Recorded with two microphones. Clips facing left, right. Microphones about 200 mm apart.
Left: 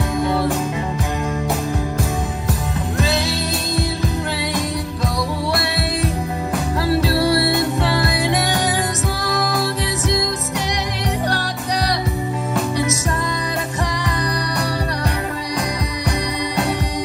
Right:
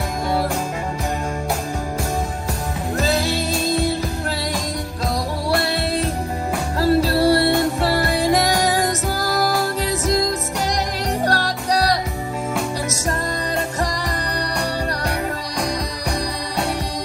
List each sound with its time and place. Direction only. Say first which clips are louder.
6.8 s music: right 3 dB; 30° right (ahead or behind)